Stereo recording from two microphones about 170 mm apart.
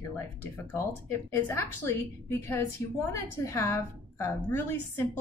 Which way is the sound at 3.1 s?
15° left (ahead or behind).